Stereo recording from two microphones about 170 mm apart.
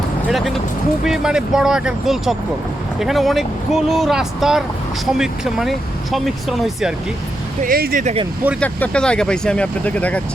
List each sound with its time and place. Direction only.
0.3 s speech: centre (ahead or behind)
7.6 s speech: 60° right (ahead or behind)
8.0 s speech: 35° right (ahead or behind)
8.6 s speech: 5° left (ahead or behind)